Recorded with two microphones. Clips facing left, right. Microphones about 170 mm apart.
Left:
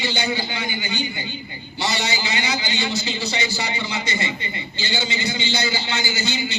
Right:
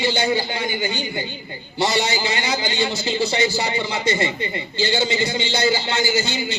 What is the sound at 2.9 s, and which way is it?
A man's voice, 45° right (ahead or behind).